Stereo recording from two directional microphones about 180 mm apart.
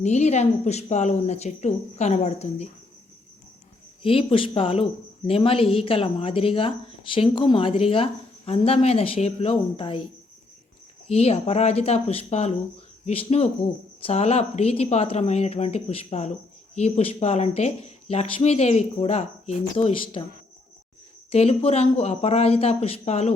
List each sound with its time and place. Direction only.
0.0 s a woman's voice: 40° left (ahead or behind)
4.0 s a woman's voice: 30° left (ahead or behind)
11.1 s a woman's voice: 35° left (ahead or behind)
21.2 s a woman's voice: 35° left (ahead or behind)